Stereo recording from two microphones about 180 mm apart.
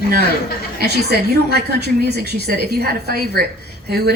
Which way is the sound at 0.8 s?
65° right (ahead or behind).